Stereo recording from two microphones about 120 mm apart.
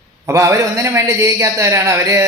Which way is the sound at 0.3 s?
25° right (ahead or behind).